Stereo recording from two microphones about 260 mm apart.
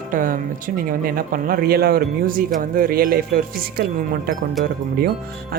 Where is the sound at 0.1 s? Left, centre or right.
Right.